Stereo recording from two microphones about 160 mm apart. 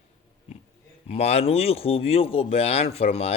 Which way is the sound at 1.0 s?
40° left (ahead or behind).